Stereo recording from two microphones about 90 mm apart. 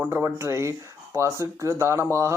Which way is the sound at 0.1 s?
30° right (ahead or behind).